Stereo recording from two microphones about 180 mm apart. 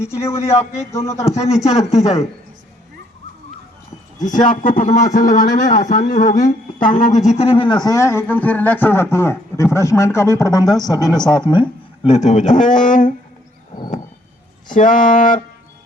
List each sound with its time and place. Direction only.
0.5 s a man's voice: 35° left (ahead or behind)
0.8 s speech: 15° left (ahead or behind)
1.3 s a man's voice: 40° left (ahead or behind)
4.4 s a man's voice: 50° left (ahead or behind); by 11.6 s 25° left (ahead or behind)
12.0 s speech: 40° left (ahead or behind)
14.7 s speech: 45° left (ahead or behind)